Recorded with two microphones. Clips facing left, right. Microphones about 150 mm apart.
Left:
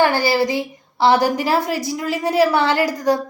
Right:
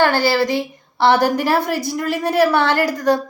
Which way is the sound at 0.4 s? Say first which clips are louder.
Right 1 dB; 65° right (ahead or behind).